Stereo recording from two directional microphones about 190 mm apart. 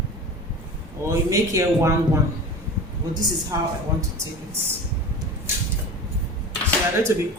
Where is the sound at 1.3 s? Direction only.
15° right (ahead or behind).